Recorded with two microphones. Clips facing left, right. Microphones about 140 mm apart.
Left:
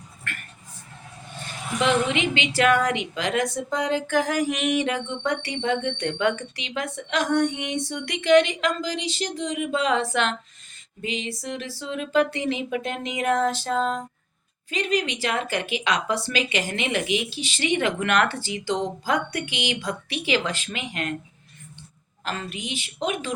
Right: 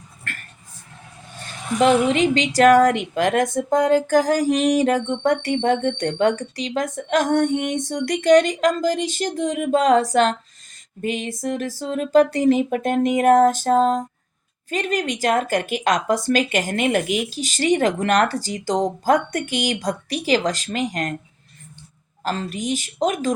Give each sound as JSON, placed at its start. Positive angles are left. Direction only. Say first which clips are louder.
{"t": 1.7, "sound": "a woman's voice", "louder": "right 7 dB", "side_deg": 0}
{"t": 2.0, "sound": "a woman's voice", "louder": "right 7 dB", "side_deg": -40}
{"t": 11.0, "sound": "a woman's voice", "louder": "right 6 dB", "side_deg": -50}
{"t": 22.2, "sound": "a woman's voice", "louder": "right 6 dB", "side_deg": -40}